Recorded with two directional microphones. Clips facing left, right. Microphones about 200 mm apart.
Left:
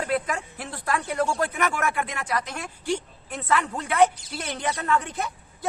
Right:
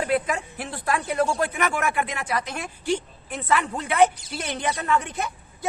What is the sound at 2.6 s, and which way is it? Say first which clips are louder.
Speech: right 2 dB; 20° right (ahead or behind).